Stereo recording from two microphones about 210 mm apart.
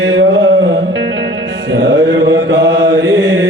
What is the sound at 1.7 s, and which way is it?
Mantra, 60° right (ahead or behind).